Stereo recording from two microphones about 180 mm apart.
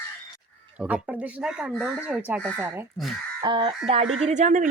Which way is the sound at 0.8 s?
5° right (ahead or behind).